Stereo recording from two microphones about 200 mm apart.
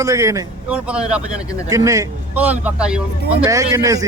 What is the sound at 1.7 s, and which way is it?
Speech, 15° right (ahead or behind).